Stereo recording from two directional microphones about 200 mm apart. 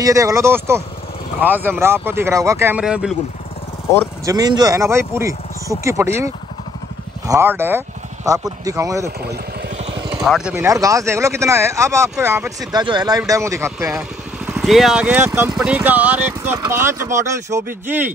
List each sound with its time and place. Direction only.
0.0 s speech: 15° right (ahead or behind)
4.3 s speech: 20° right (ahead or behind)
10.2 s speech: centre (ahead or behind)
10.5 s speech: 15° right (ahead or behind)
14.4 s speech: 5° right (ahead or behind)